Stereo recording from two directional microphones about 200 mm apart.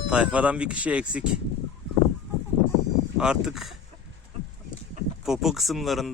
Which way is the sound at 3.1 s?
5° right (ahead or behind).